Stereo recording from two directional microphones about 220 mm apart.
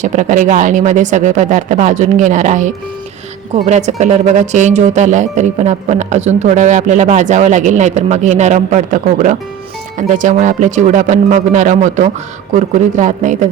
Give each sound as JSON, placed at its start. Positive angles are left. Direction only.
{"t": 0.0, "sound": "speech", "side_deg": -35}